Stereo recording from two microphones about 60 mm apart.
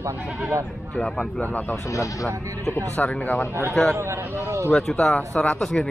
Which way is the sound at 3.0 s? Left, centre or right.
Left.